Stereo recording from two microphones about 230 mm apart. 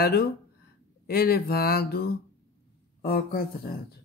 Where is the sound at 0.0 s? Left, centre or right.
Left.